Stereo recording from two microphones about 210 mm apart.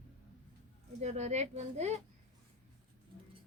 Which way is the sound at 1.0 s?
35° right (ahead or behind).